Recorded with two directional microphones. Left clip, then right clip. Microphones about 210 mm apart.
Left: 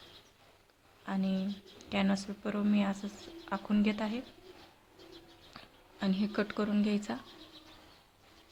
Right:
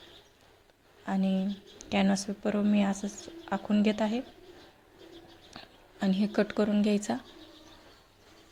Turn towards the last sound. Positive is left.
turn(degrees=-20)  # may be behind; listen again after turning